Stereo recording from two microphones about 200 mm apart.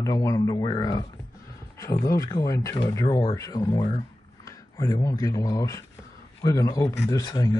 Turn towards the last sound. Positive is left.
turn(degrees=20)  # may be behind; listen again after turning